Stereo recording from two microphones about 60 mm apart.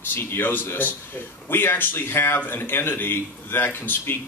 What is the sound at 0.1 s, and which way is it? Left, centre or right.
Speech, left.